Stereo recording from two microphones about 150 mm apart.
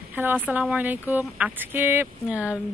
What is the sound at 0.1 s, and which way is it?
Speech, 10° right (ahead or behind).